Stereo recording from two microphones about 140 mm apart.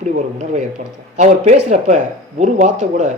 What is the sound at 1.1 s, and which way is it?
Speech, 60° right (ahead or behind).